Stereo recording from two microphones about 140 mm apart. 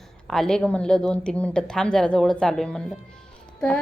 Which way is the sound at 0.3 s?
5° left (ahead or behind).